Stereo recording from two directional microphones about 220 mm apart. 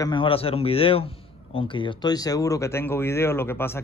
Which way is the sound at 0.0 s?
20° left (ahead or behind).